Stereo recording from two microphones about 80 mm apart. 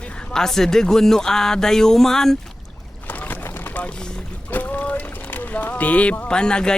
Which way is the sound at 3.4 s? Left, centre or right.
Left.